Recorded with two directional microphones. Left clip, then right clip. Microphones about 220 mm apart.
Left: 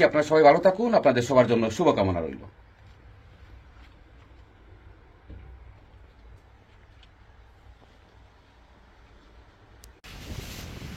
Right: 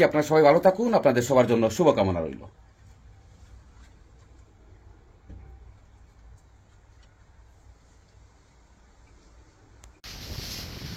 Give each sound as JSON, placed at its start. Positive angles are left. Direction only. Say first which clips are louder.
{"t": 0.0, "sound": "speech", "louder": "left 1 dB", "side_deg": -40}
{"t": 10.1, "sound": "boat", "louder": "right 4 dB", "side_deg": 0}